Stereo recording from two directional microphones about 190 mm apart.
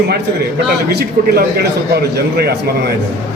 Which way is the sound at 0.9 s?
55° right (ahead or behind).